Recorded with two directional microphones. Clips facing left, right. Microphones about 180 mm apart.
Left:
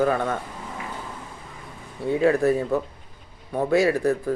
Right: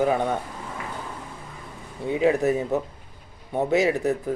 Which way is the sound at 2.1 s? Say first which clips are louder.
Left 1 dB; 15° right (ahead or behind).